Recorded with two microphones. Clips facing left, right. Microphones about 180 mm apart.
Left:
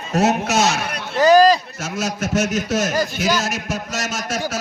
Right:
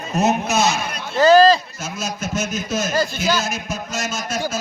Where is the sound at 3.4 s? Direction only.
80° left.